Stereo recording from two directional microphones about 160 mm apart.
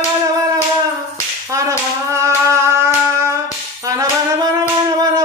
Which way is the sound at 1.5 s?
20° right (ahead or behind).